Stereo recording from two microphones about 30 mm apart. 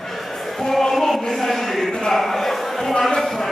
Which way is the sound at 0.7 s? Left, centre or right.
Centre.